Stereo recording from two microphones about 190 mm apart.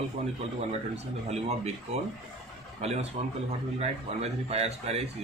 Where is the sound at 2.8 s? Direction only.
35° right (ahead or behind).